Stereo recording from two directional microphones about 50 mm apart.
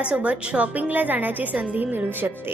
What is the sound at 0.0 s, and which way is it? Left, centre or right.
A woman's voice, right.